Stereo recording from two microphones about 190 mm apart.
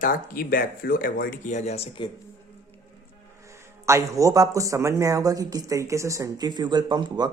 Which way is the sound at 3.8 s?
15° right (ahead or behind).